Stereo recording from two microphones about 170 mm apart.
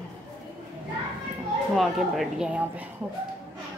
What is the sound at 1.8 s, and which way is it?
Speech, centre (ahead or behind).